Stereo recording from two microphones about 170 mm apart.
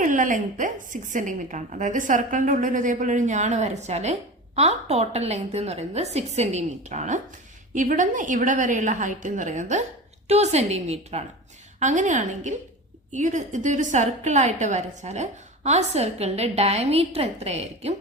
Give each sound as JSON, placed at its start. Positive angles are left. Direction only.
{"t": 0.0, "sound": "a woman's voice", "side_deg": -50}